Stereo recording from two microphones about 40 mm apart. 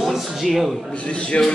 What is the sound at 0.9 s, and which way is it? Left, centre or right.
Speech, left.